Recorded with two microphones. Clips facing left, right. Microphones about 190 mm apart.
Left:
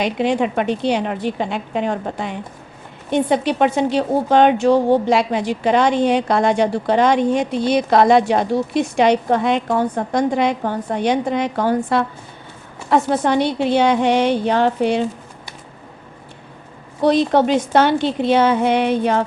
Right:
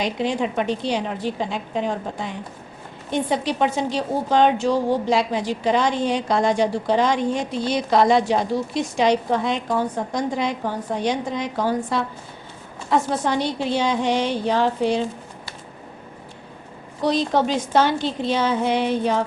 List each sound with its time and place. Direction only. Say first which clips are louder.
0.0 s a woman's voice: left 5 dB; 60° left (ahead or behind)
17.0 s a woman's voice: left 5 dB; 60° left (ahead or behind)